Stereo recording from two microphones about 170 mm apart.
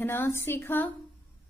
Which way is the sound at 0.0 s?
15° left (ahead or behind).